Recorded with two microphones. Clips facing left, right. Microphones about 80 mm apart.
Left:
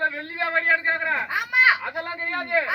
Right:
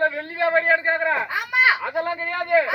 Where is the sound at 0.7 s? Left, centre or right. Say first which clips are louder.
Right 2 dB; centre.